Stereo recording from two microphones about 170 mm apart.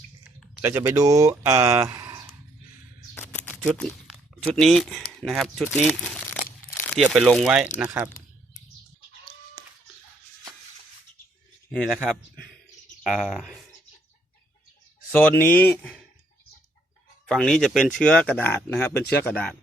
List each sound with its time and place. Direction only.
0.6 s speech: 15° right (ahead or behind)
3.2 s a sound: 10° left (ahead or behind)
3.6 s speech: centre (ahead or behind)
11.7 s speech: centre (ahead or behind)
15.1 s speech: 10° left (ahead or behind)
17.2 s speech: 5° left (ahead or behind)